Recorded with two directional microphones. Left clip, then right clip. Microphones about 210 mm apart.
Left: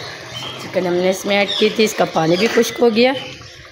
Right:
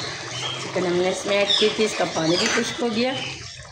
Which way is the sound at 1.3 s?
50° left (ahead or behind).